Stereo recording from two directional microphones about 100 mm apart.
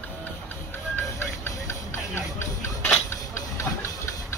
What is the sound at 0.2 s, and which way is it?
Music, 20° left (ahead or behind).